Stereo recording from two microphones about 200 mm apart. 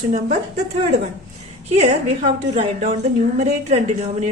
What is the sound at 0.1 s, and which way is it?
Speech, 35° right (ahead or behind).